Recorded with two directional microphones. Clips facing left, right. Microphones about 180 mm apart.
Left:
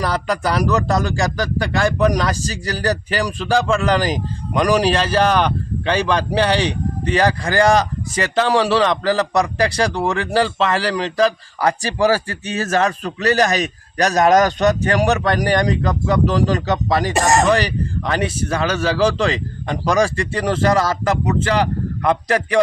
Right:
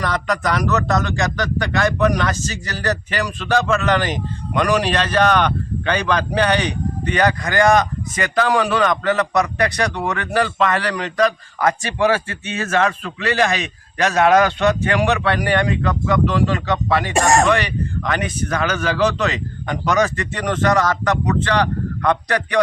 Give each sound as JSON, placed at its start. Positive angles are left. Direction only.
{"t": 0.0, "sound": "a man's voice", "side_deg": 35}
{"t": 17.2, "sound": "speech", "side_deg": 0}
{"t": 17.5, "sound": "a man's voice", "side_deg": 35}